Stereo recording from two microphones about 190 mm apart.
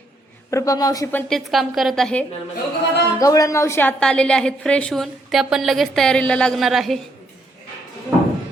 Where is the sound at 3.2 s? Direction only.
15° left (ahead or behind); by 7.0 s centre (ahead or behind).